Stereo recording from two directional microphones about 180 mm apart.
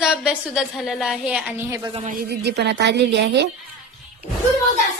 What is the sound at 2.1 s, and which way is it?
A woman's voice, 55° right (ahead or behind).